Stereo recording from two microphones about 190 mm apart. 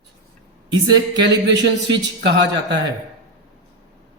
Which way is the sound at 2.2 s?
65° right (ahead or behind).